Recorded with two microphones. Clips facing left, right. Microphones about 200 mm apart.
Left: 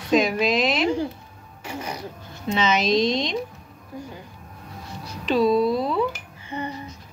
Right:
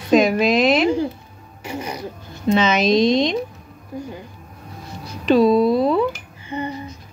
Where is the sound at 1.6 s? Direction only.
10° right (ahead or behind).